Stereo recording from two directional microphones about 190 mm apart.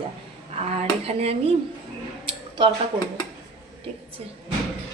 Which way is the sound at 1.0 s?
30° right (ahead or behind).